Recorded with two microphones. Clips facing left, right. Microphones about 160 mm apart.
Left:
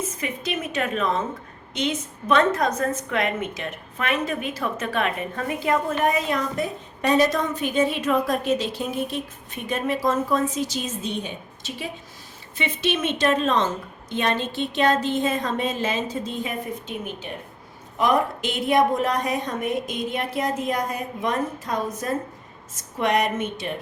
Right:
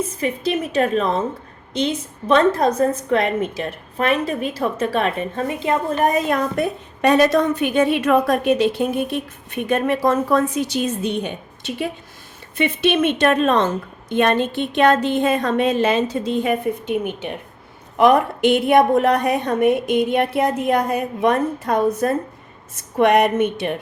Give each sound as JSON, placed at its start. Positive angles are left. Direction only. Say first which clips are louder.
{"t": 0.0, "sound": "a woman's voice", "louder": "right 7 dB", "side_deg": -30}
{"t": 5.9, "sound": "a woman's voice", "louder": "right 4 dB", "side_deg": -40}